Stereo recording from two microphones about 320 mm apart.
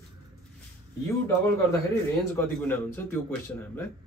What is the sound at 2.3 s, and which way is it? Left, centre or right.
Speech, centre.